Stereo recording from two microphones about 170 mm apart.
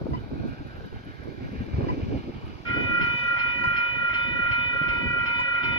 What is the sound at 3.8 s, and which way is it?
Train, 30° left (ahead or behind).